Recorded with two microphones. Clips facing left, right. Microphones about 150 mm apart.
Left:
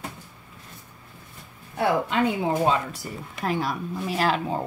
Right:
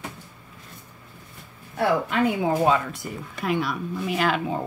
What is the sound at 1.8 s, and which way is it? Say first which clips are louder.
Speech: even; 20° left (ahead or behind).